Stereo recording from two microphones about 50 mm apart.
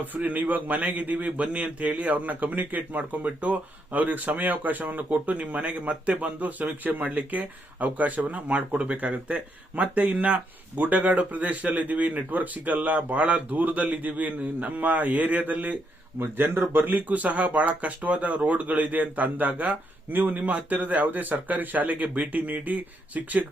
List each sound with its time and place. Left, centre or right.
0.0 s speech: right
16.1 s speech: right